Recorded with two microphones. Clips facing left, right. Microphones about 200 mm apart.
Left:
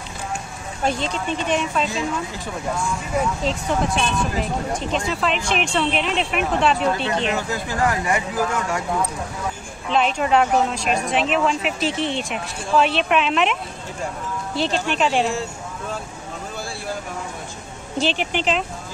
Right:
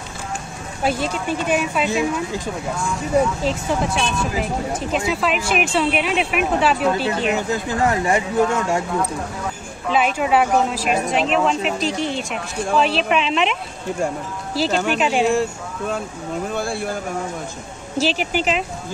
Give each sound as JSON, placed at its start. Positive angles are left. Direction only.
{"t": 0.8, "sound": "a woman's voice", "side_deg": -5}
{"t": 3.4, "sound": "speech", "side_deg": 0}
{"t": 7.3, "sound": "speech", "side_deg": -25}
{"t": 10.1, "sound": "speech", "side_deg": -5}
{"t": 16.5, "sound": "a sound", "side_deg": -55}
{"t": 17.9, "sound": "speech", "side_deg": -5}